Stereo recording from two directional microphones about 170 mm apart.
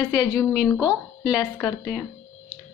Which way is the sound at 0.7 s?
20° left (ahead or behind).